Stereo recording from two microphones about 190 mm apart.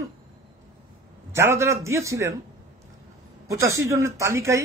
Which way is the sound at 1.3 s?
15° right (ahead or behind).